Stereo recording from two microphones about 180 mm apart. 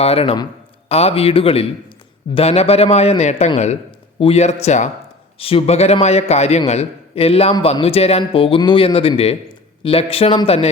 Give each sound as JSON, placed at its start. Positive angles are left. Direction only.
{"t": 0.0, "sound": "speech", "side_deg": 35}